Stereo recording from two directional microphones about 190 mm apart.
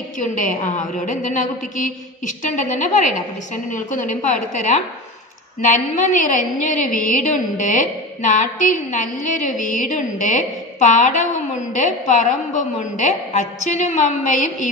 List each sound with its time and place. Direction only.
0.2 s a woman's voice: 40° left (ahead or behind)
5.6 s a woman's voice: 40° left (ahead or behind)